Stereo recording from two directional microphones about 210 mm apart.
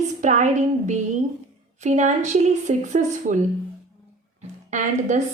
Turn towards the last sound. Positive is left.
turn(degrees=-35)  # may be behind; listen again after turning